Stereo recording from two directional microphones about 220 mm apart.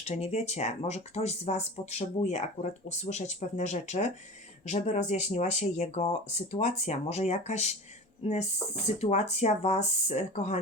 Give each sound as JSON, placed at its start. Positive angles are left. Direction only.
{"t": 0.0, "sound": "speech", "side_deg": 30}